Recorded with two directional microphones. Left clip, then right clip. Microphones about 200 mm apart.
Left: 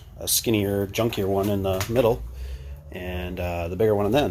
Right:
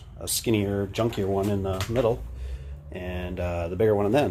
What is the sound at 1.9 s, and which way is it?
Speech, 25° left (ahead or behind).